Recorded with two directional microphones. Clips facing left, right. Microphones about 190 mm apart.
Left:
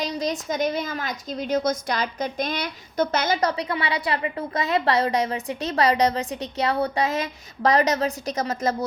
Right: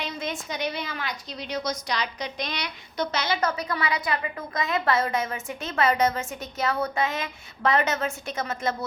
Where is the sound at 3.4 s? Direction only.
30° left (ahead or behind).